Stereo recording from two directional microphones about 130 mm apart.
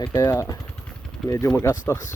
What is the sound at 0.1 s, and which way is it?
Speech, 20° left (ahead or behind).